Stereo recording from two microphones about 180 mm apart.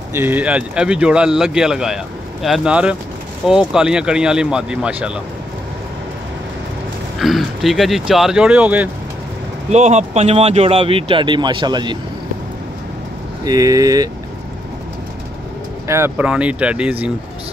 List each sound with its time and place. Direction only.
0.1 s speech: 10° right (ahead or behind)
7.2 s speech: centre (ahead or behind)
9.7 s speech: 40° right (ahead or behind)
13.5 s speech: 20° right (ahead or behind)
15.9 s speech: 10° right (ahead or behind)